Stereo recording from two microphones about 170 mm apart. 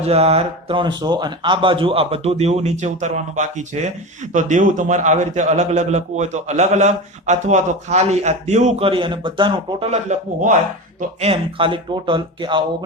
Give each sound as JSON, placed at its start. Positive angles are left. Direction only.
{"t": 0.0, "sound": "a man's voice", "side_deg": -35}
{"t": 9.9, "sound": "a man's voice", "side_deg": -45}
{"t": 11.2, "sound": "speech", "side_deg": -35}